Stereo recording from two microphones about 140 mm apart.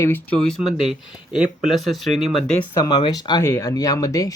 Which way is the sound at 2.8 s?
35° left (ahead or behind).